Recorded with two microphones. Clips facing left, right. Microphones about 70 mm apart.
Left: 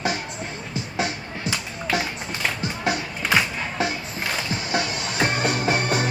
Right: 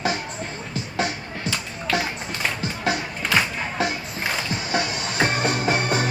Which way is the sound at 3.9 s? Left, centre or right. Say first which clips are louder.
Right 1 dB; centre.